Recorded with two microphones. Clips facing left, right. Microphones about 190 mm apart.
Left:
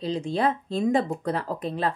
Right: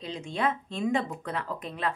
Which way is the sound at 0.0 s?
35° left (ahead or behind).